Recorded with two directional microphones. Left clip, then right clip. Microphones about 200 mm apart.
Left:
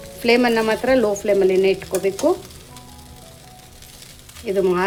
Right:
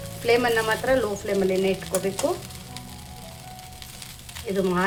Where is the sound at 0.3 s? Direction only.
35° left (ahead or behind).